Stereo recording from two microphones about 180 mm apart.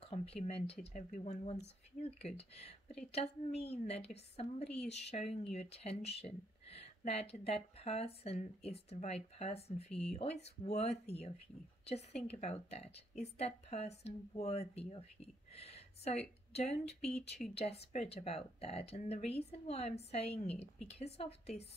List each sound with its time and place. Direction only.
0.0 s a woman's voice: 35° left (ahead or behind)